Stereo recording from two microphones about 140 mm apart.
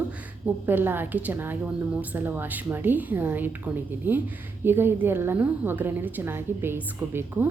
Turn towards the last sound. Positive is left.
turn(degrees=-15)  # may be behind; listen again after turning